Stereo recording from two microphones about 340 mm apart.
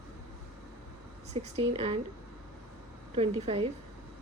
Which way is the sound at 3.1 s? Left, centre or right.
Centre.